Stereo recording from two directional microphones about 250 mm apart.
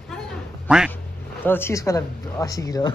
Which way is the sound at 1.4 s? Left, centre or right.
Centre.